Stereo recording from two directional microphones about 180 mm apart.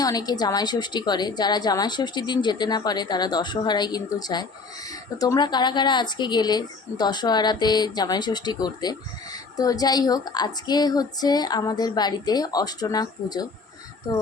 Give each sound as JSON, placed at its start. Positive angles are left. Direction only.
{"t": 0.0, "sound": "a woman's voice", "side_deg": 20}